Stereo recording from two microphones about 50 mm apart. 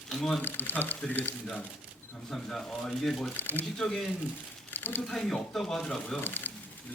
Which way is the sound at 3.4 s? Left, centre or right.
Left.